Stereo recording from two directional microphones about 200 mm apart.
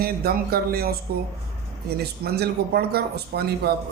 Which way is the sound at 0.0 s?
50° right (ahead or behind).